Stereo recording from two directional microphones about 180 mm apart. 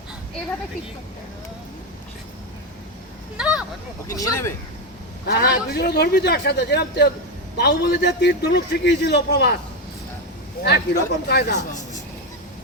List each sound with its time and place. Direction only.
3.3 s a sound: 5° right (ahead or behind)
4.1 s speech: 20° left (ahead or behind)
5.2 s a man's voice: 60° left (ahead or behind)
10.6 s a man's voice: 65° left (ahead or behind)